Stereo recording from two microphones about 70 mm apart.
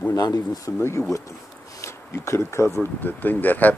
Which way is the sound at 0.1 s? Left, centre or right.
Left.